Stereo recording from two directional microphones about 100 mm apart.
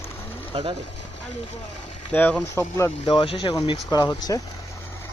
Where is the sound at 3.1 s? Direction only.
55° left (ahead or behind).